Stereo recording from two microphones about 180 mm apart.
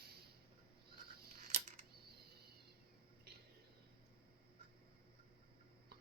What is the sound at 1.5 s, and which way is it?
Scissors, 40° right (ahead or behind).